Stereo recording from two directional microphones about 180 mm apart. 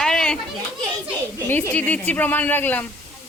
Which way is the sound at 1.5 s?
10° left (ahead or behind).